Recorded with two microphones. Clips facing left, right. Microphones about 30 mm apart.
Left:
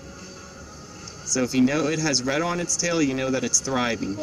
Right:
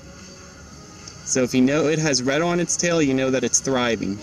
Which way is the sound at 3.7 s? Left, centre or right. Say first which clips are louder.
Right 3 dB; centre.